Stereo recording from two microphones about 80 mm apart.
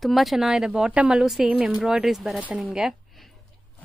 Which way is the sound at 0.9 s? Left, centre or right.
Centre.